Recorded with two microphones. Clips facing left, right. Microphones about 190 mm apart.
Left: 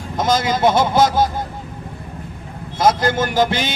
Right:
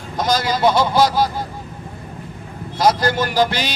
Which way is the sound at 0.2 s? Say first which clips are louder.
Left 1 dB; 20° left (ahead or behind).